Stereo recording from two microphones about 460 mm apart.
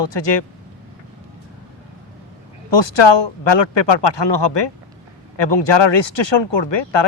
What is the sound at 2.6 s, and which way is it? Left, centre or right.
Speech, left.